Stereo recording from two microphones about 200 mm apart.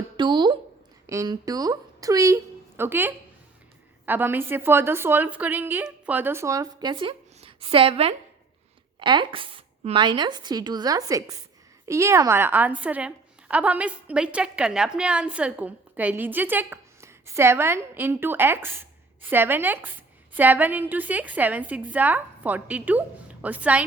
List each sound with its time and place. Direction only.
0.2 s a woman's voice: 20° right (ahead or behind)